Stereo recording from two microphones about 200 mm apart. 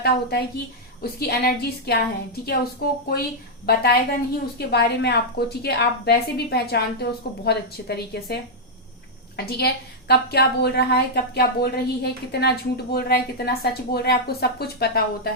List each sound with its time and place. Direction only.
0.0 s a woman's voice: 50° left (ahead or behind)